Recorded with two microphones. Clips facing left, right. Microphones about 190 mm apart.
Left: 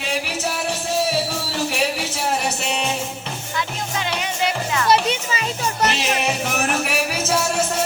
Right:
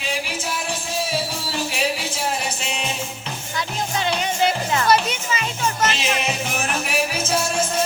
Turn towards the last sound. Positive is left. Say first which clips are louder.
# left 1 dB
turn(degrees=70)  # may be behind; listen again after turning